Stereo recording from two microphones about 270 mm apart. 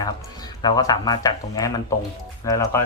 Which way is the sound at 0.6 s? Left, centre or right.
Centre.